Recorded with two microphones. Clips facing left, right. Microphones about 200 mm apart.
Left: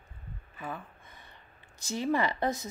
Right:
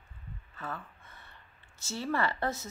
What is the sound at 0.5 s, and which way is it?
Speech, 15° left (ahead or behind).